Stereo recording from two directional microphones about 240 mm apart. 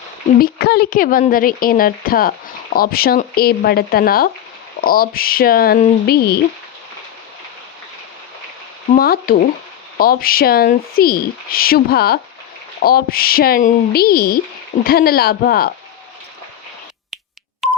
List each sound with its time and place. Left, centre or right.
0.3 s speech: left
8.9 s speech: left
17.6 s telephone dialing: centre